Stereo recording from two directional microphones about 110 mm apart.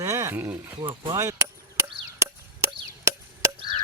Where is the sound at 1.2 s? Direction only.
25° right (ahead or behind).